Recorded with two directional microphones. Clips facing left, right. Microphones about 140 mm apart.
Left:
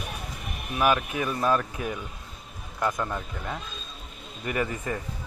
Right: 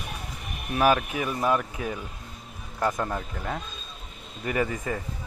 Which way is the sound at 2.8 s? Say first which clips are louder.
Right 1 dB; 35° right (ahead or behind).